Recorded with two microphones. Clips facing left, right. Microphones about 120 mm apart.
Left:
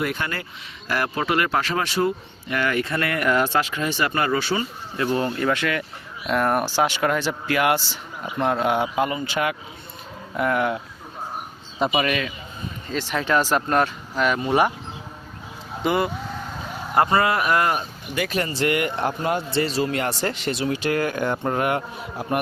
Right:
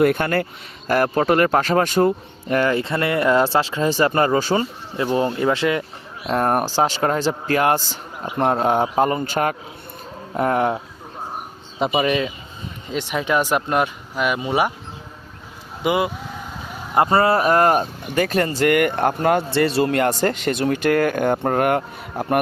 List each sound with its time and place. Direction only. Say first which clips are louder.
0.0 s speech: right 9 dB; 50° right (ahead or behind)
4.9 s speech: right 3 dB; 20° right (ahead or behind)
6.3 s speech: right 2 dB; 40° right (ahead or behind)
11.9 s speech: right 4 dB; 25° right (ahead or behind); by 14.7 s 10° right (ahead or behind)
15.8 s speech: right 2 dB; 10° right (ahead or behind)
17.1 s speech: right 4 dB; 35° right (ahead or behind); by 22.4 s 55° right (ahead or behind)